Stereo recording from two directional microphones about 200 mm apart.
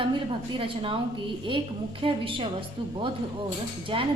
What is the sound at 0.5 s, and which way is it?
A woman's voice, 25° right (ahead or behind).